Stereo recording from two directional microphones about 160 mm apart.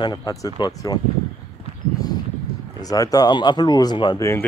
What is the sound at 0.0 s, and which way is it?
Speech, 25° left (ahead or behind).